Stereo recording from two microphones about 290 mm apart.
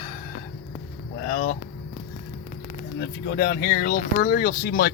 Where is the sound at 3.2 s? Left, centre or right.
Left.